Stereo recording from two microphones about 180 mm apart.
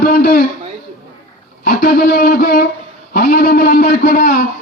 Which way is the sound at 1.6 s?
55° left (ahead or behind).